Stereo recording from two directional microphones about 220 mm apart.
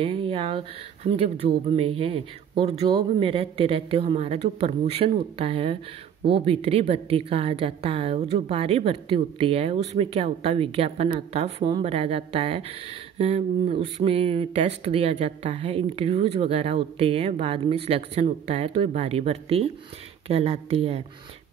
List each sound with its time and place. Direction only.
0.0 s speech: 25° right (ahead or behind)